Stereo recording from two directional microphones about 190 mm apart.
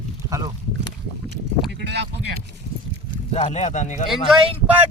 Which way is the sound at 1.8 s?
65° right (ahead or behind).